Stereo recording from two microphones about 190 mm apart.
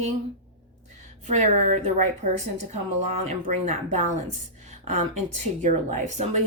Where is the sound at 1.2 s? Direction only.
40° right (ahead or behind).